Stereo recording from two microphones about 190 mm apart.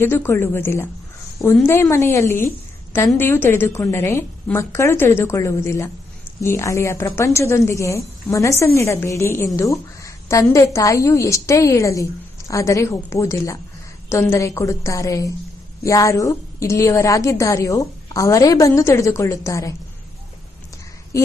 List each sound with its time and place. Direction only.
0.0 s a woman's voice: 10° left (ahead or behind)